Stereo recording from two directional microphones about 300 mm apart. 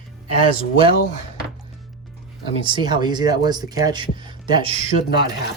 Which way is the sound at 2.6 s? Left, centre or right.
Centre.